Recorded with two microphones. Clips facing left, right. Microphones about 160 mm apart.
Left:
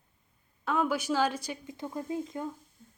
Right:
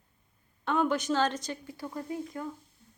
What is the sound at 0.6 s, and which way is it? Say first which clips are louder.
A woman's voice: right 1 dB; 5° left (ahead or behind).